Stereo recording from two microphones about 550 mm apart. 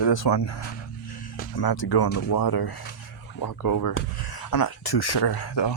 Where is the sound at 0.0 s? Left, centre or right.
Left.